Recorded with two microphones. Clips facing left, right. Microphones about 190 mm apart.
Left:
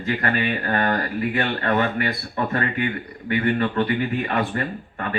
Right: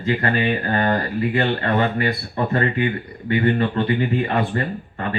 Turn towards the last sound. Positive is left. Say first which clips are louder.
# right 2 dB
turn(degrees=-30)  # may be behind; listen again after turning